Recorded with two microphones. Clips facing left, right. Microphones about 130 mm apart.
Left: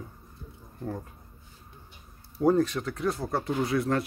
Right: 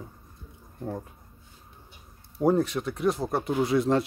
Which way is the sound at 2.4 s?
15° right (ahead or behind).